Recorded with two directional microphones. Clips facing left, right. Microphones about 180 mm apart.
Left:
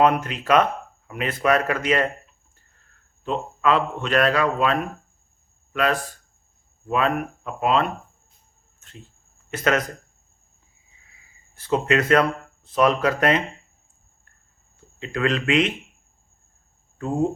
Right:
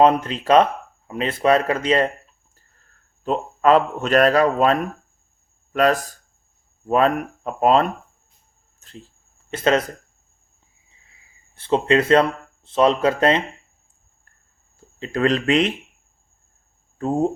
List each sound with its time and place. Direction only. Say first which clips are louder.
0.0 s speech: right 3 dB; 30° right (ahead or behind)
3.2 s speech: right 5 dB; 40° right (ahead or behind)
11.5 s speech: right 3 dB; 30° right (ahead or behind)
14.9 s speech: right 4 dB; 35° right (ahead or behind)
17.0 s speech: right 3 dB; 40° right (ahead or behind)